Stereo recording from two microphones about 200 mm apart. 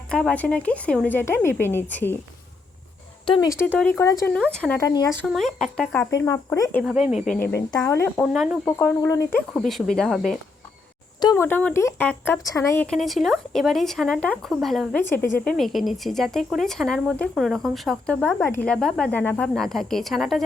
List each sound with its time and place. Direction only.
0.1 s speech: 5° left (ahead or behind)
3.2 s speech: 20° left (ahead or behind)
4.5 s speech: 5° left (ahead or behind)
4.8 s speech: 20° left (ahead or behind)
5.2 s speech: centre (ahead or behind)
6.1 s speech: 15° left (ahead or behind)
6.8 s speech: 5° right (ahead or behind)
7.3 s speech: 10° left (ahead or behind)
8.2 s speech: centre (ahead or behind)
8.8 s speech: 15° left (ahead or behind)
9.5 s speech: centre (ahead or behind)
11.2 s speech: 15° left (ahead or behind)